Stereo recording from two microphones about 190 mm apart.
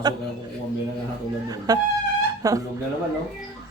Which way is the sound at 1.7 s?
20° right (ahead or behind).